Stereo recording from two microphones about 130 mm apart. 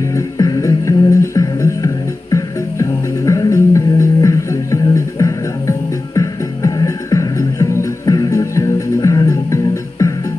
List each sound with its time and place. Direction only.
0.1 s music: 25° left (ahead or behind)